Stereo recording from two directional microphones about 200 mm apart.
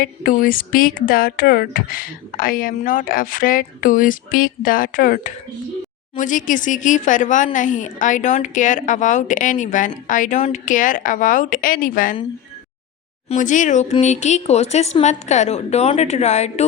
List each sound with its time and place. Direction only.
0.0 s a woman's voice: 45° left (ahead or behind)
13.2 s a woman's voice: 40° left (ahead or behind)